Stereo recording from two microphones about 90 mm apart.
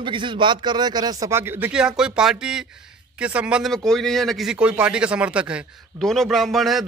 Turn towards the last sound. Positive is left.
turn(degrees=0)  # may be behind; listen again after turning